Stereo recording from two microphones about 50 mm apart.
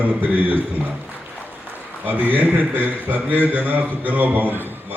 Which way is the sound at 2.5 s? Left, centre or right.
Right.